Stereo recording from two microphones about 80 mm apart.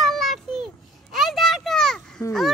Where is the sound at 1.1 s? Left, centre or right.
Centre.